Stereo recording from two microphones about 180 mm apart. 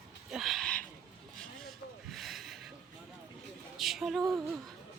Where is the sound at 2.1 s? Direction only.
Centre (ahead or behind).